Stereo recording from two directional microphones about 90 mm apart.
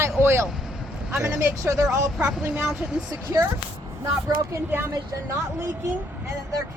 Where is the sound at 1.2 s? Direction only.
35° right (ahead or behind).